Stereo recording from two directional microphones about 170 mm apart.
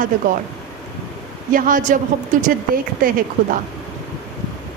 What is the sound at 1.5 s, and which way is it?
Speech, 55° right (ahead or behind).